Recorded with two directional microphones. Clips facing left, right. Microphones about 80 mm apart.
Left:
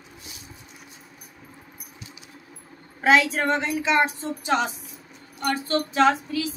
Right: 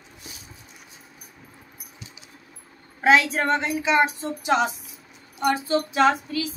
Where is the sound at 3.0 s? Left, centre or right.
Centre.